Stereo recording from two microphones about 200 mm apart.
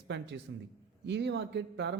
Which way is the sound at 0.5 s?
65° right (ahead or behind).